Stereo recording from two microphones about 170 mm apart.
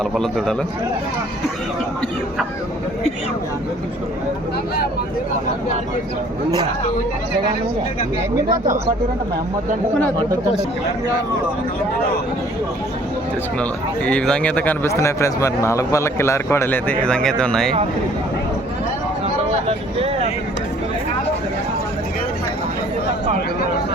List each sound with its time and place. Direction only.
0.0 s a man's voice: centre (ahead or behind)
13.6 s speech: 5° left (ahead or behind)
19.6 s vehicle: 35° right (ahead or behind)